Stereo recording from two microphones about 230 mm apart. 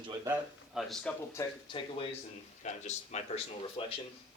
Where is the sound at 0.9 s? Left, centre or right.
Centre.